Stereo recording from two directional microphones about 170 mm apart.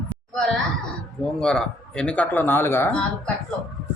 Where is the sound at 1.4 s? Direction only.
5° left (ahead or behind).